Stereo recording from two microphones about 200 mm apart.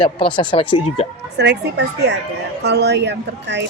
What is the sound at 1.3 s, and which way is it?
Speech, 60° right (ahead or behind).